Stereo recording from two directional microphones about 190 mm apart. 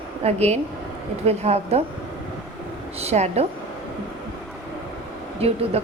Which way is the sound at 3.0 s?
35° right (ahead or behind).